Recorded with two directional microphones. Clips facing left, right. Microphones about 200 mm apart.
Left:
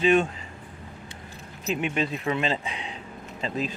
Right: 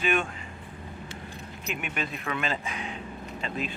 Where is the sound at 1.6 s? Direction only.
25° left (ahead or behind).